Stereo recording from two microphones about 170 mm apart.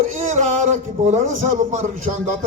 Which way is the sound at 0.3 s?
45° right (ahead or behind).